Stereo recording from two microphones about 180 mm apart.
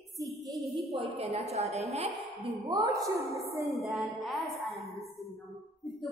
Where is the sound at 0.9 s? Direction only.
35° right (ahead or behind).